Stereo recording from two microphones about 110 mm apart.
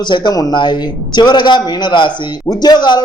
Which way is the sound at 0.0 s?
45° left (ahead or behind).